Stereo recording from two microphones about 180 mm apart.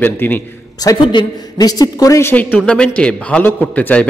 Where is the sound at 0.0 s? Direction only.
10° left (ahead or behind).